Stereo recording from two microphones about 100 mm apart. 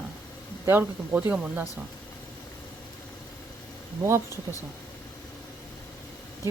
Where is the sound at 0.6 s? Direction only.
20° right (ahead or behind).